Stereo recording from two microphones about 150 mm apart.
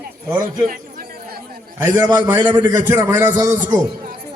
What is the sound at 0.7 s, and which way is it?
Chatter, 70° right (ahead or behind).